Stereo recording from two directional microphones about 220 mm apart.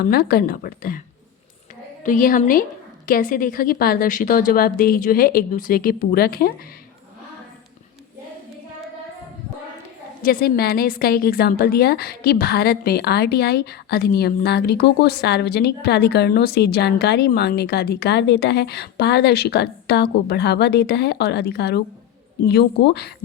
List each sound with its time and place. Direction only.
0.0 s a woman's voice: 45° left (ahead or behind)
2.0 s a woman's voice: 40° left (ahead or behind)
10.2 s a woman's voice: 45° left (ahead or behind)